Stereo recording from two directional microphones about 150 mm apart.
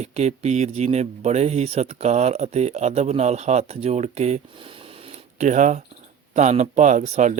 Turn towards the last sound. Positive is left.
turn(degrees=-50)  # may be behind; listen again after turning